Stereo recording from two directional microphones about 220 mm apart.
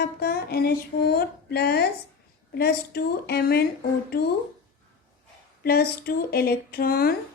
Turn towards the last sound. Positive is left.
turn(degrees=40)  # may be behind; listen again after turning